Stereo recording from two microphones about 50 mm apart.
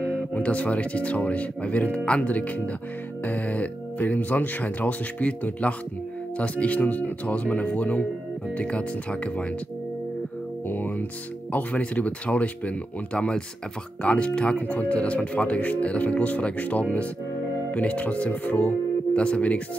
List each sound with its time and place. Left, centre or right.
0.0 s speech: left
10.7 s speech: left